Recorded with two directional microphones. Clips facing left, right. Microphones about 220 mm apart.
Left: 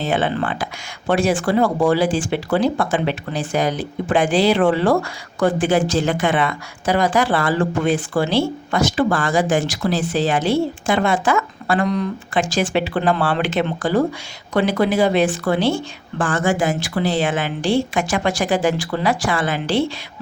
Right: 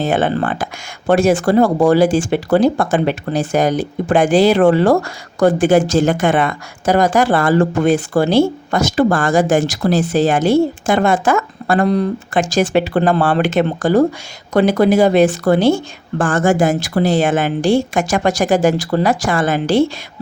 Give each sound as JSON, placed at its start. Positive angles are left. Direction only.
{"t": 0.0, "sound": "a woman's voice", "side_deg": -45}